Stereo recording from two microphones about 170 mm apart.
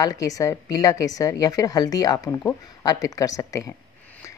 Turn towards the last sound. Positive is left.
turn(degrees=20)  # may be behind; listen again after turning